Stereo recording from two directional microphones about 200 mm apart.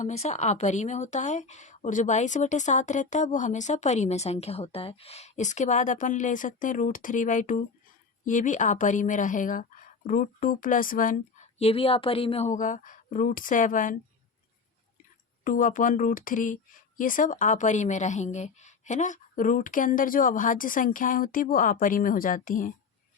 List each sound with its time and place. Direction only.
0.0 s speech: 35° left (ahead or behind)
11.6 s speech: 30° left (ahead or behind)
15.4 s speech: 40° left (ahead or behind)